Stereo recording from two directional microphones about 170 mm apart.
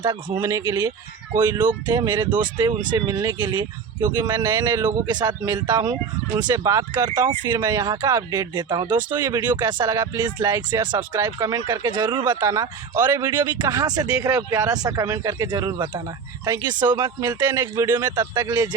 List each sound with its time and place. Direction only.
0.0 s speech: 25° right (ahead or behind)